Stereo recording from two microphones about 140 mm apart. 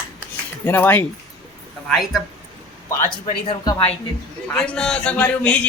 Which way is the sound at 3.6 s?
30° left (ahead or behind).